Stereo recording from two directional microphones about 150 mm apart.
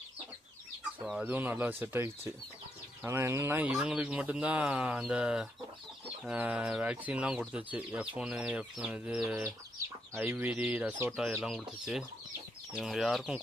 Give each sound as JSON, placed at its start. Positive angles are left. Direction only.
{"t": 1.0, "sound": "speech", "side_deg": -5}
{"t": 9.7, "sound": "speech", "side_deg": -15}
{"t": 11.3, "sound": "speech", "side_deg": 0}